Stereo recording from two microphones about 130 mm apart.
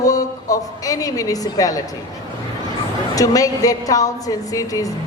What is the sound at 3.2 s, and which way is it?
A woman's voice, 25° left (ahead or behind).